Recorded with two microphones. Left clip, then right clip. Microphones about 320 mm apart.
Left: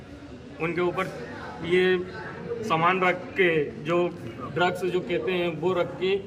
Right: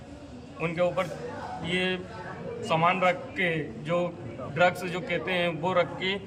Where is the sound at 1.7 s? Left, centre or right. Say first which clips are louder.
Left 7 dB; right.